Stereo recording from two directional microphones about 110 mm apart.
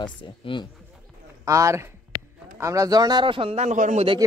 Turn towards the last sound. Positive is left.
turn(degrees=-85)